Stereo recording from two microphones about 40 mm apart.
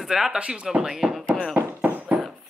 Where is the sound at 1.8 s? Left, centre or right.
Right.